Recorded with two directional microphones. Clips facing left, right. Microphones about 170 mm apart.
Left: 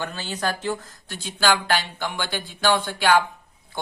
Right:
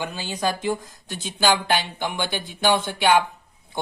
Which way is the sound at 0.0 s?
10° right (ahead or behind).